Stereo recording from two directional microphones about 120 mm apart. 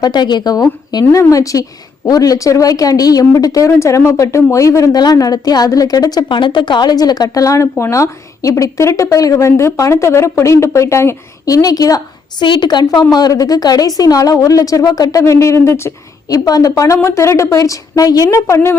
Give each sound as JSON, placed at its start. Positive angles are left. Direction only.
{"t": 0.0, "sound": "a woman's voice", "side_deg": 35}